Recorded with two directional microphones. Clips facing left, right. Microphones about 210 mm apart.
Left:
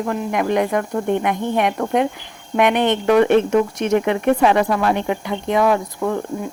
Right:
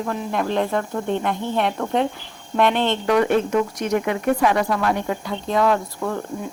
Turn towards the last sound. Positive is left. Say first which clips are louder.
# left 3 dB
turn(degrees=15)  # may be behind; listen again after turning